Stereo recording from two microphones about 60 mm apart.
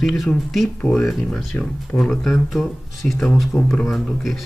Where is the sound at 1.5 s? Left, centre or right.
Left.